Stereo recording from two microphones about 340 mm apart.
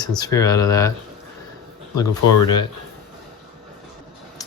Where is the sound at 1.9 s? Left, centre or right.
Centre.